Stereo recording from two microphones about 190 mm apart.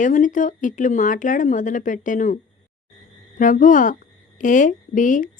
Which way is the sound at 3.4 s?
45° left (ahead or behind).